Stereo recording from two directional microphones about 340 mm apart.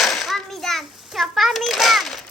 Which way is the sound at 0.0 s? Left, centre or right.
Centre.